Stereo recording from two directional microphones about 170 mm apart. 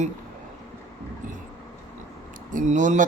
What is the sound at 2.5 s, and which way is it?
Mantra, 45° right (ahead or behind).